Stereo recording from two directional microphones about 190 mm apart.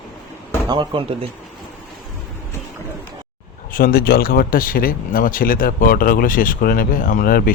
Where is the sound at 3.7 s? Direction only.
50° left (ahead or behind).